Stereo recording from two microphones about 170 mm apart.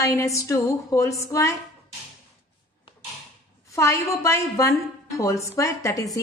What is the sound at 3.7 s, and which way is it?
A woman's voice, 15° left (ahead or behind).